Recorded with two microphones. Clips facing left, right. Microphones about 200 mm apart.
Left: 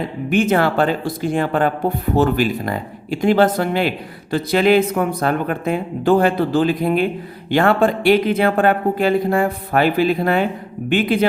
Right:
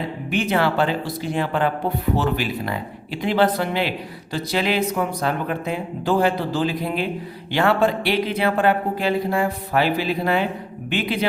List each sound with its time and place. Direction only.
0.3 s speech: 50° left (ahead or behind)